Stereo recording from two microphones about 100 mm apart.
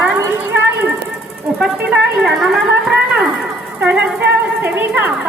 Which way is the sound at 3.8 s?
15° right (ahead or behind).